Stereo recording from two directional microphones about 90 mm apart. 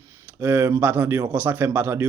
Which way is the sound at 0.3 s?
20° right (ahead or behind).